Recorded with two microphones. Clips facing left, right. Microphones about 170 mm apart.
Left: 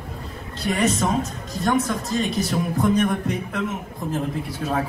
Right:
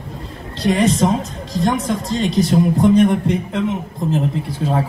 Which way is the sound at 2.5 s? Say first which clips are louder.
Right 9 dB; 30° right (ahead or behind).